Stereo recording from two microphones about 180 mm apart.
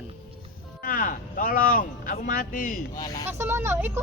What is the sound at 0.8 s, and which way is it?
Speech, 50° left (ahead or behind).